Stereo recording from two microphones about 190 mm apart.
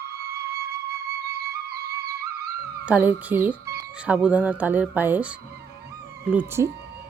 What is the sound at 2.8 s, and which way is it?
Speech, 10° right (ahead or behind).